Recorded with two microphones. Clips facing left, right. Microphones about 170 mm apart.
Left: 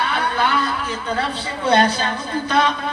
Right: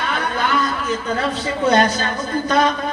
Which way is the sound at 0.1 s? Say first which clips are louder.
Even; 30° left (ahead or behind).